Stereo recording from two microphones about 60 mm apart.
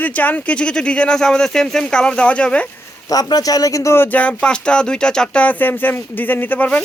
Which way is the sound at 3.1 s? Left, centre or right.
Left.